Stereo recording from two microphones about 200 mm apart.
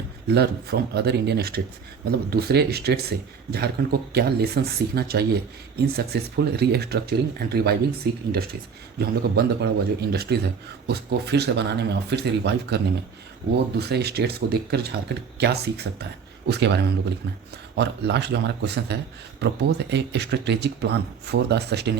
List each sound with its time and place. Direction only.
0.3 s speech: 55° right (ahead or behind)
9.0 s speech: 50° right (ahead or behind)
17.7 s speech: 55° right (ahead or behind)